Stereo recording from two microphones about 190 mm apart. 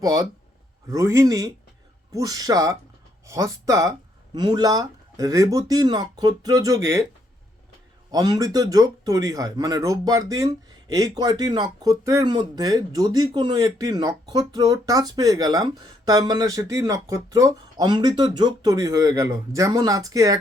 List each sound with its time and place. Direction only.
0.0 s speech: 20° right (ahead or behind)
8.1 s speech: 20° right (ahead or behind)